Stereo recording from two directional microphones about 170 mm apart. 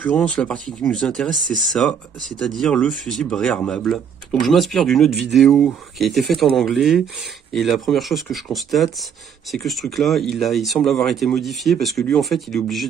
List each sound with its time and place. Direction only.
0.0 s speech: 5° left (ahead or behind)
1.3 s speech: 50° right (ahead or behind)
1.7 s speech: centre (ahead or behind)